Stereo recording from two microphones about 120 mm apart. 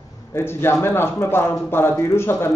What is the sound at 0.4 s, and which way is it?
Speech, 20° left (ahead or behind).